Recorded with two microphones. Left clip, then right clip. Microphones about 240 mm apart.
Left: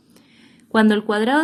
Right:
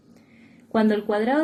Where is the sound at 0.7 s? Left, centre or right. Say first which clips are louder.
Left 4 dB; left.